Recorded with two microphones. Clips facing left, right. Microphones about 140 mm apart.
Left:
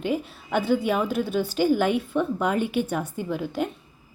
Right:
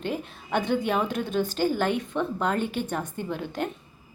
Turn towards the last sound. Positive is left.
turn(degrees=5)  # may be behind; listen again after turning